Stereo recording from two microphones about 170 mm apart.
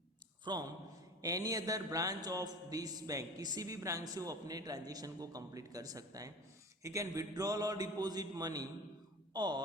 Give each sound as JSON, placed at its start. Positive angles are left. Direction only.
{"t": 0.5, "sound": "mantra", "side_deg": -25}
{"t": 9.3, "sound": "speech", "side_deg": -25}